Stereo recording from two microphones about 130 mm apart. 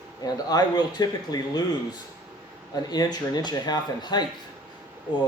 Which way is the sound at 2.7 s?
30° left (ahead or behind).